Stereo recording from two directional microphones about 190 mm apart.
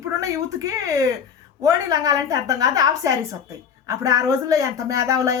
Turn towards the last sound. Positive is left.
turn(degrees=-15)  # may be behind; listen again after turning